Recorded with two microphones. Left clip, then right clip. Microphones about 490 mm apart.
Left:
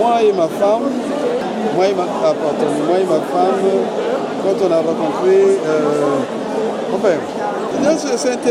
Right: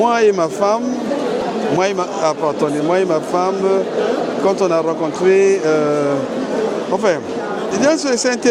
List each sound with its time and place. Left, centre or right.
0.1 s speech: right
5.3 s speech: right